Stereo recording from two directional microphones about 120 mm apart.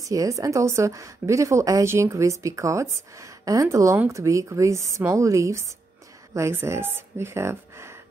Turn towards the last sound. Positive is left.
turn(degrees=-20)  # may be behind; listen again after turning